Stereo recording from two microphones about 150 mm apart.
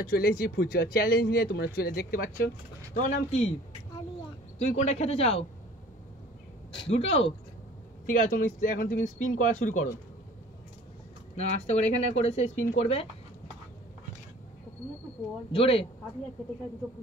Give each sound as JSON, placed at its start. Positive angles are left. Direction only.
{"t": 0.0, "sound": "speech", "side_deg": 90}
{"t": 4.6, "sound": "speech", "side_deg": 50}
{"t": 6.9, "sound": "speech", "side_deg": 45}
{"t": 8.1, "sound": "speech", "side_deg": 65}
{"t": 11.3, "sound": "speech", "side_deg": 45}
{"t": 15.5, "sound": "speech", "side_deg": 40}